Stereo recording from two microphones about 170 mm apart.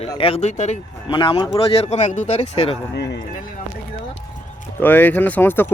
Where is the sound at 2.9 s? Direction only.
90° left.